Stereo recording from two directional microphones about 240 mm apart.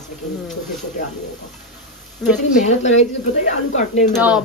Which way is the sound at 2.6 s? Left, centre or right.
Left.